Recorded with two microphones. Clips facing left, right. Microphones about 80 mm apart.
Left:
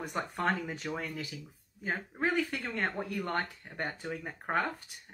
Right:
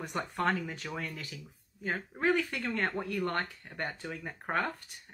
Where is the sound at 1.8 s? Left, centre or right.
Centre.